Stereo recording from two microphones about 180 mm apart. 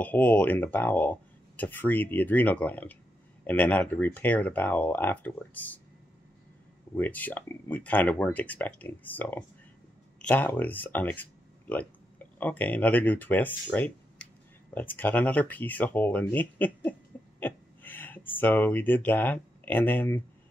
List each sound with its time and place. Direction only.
0.0 s speech: 10° left (ahead or behind)
7.0 s speech: 10° left (ahead or behind)